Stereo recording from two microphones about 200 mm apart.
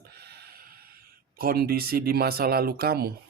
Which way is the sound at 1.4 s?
50° right (ahead or behind).